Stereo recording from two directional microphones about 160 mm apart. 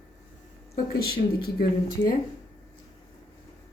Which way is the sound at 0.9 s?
75° left (ahead or behind).